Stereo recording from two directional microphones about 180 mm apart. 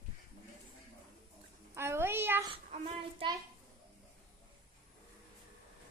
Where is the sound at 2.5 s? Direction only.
30° right (ahead or behind).